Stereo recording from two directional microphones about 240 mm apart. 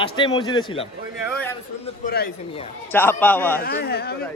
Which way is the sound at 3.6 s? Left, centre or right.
Left.